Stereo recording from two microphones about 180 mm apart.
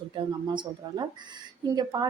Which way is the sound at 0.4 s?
25° right (ahead or behind).